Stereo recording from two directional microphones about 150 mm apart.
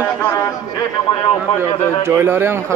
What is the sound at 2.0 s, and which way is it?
Speech, 15° right (ahead or behind).